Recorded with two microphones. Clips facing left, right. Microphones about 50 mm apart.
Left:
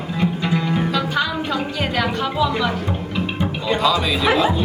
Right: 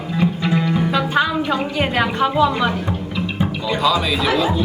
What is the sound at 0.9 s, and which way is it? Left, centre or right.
Music, right.